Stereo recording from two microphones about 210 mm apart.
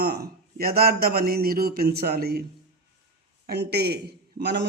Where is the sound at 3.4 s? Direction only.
50° right (ahead or behind).